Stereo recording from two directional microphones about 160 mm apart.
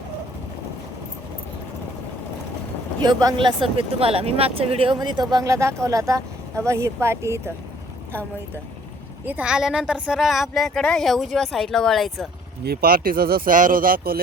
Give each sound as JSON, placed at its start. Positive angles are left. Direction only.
{"t": 3.0, "sound": "speech", "side_deg": -25}
{"t": 9.2, "sound": "speech", "side_deg": -10}
{"t": 12.6, "sound": "speech", "side_deg": -75}